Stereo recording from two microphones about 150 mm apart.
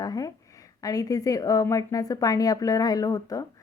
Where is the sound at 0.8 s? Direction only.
25° left (ahead or behind).